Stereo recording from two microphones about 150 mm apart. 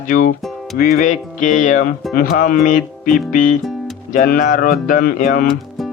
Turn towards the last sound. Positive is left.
turn(degrees=65)  # may be behind; listen again after turning